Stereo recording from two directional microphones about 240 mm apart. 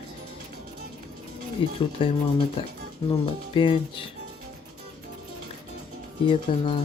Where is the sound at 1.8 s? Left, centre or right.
Left.